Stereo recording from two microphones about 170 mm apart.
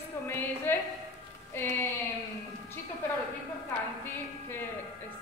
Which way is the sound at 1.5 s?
15° left (ahead or behind).